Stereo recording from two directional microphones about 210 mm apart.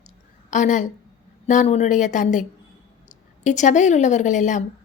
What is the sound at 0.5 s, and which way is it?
A woman's voice, 35° left (ahead or behind).